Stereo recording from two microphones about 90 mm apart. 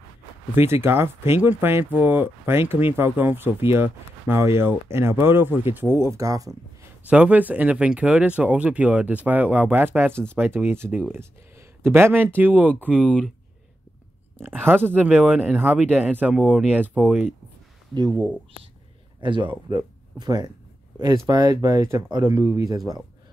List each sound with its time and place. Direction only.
0.6 s speech: 25° right (ahead or behind)
7.1 s speech: 15° right (ahead or behind)
13.0 s speech: 5° left (ahead or behind)
14.4 s speech: 25° right (ahead or behind)
19.2 s speech: 60° right (ahead or behind)
20.2 s speech: 50° right (ahead or behind)
22.2 s speech: 30° right (ahead or behind)